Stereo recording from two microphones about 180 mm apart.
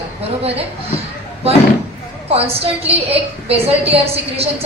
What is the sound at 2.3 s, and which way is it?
A woman's voice, 35° right (ahead or behind).